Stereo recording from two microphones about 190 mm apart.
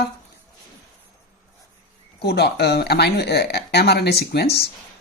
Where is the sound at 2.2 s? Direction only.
60° left (ahead or behind).